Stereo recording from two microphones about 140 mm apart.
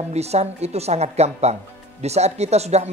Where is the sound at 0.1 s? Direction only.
50° right (ahead or behind).